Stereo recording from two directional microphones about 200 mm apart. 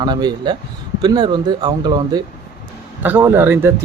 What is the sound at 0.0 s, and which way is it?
Speech, 20° right (ahead or behind).